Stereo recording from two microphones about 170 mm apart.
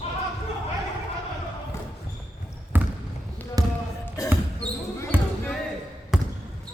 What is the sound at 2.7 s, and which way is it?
Basketball bounce, 10° right (ahead or behind).